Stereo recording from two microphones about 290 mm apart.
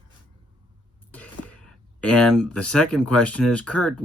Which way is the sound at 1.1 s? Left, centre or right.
Centre.